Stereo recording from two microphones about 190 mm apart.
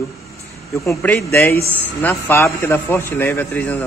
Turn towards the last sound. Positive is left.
turn(degrees=10)  # may be behind; listen again after turning